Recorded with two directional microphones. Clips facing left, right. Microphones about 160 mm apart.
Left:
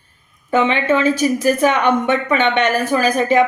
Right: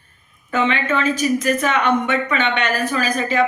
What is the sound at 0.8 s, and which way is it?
Speech, 10° left (ahead or behind).